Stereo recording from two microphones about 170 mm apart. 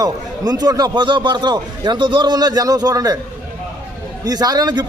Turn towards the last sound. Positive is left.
turn(degrees=-25)  # may be behind; listen again after turning